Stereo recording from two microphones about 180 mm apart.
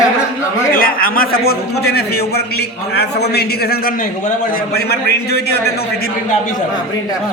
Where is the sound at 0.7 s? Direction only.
55° left (ahead or behind).